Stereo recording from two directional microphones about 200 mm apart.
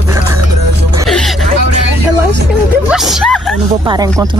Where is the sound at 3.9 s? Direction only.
20° right (ahead or behind).